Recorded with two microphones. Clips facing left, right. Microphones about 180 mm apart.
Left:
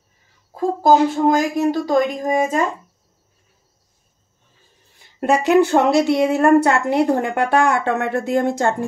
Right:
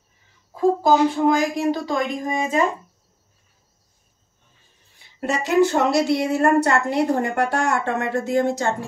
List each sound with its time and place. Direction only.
0.8 s a woman's voice: 45° left (ahead or behind)
5.2 s a woman's voice: 60° left (ahead or behind)